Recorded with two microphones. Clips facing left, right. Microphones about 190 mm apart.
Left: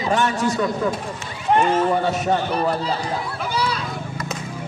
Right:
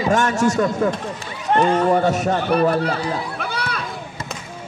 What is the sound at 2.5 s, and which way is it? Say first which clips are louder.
Speech: right 5 dB; 60° right (ahead or behind).